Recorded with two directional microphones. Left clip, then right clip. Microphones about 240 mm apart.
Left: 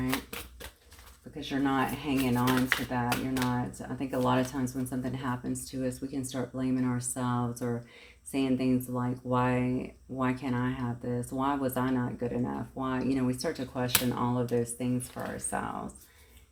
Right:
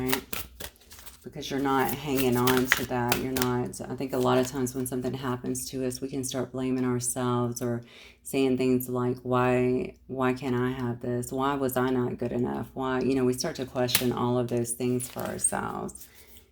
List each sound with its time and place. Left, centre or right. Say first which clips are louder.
0.0 s typewriter: right 3 dB; right
1.4 s speech: right 3 dB; right